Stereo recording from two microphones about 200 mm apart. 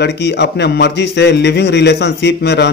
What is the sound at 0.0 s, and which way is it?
A man's voice, 55° left (ahead or behind).